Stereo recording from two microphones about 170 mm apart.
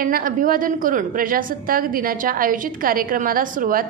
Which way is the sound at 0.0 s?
55° right (ahead or behind).